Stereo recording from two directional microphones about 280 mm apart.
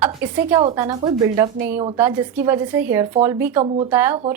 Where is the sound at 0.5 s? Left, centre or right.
Centre.